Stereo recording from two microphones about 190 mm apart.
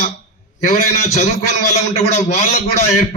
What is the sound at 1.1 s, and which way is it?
Speech, 50° left (ahead or behind).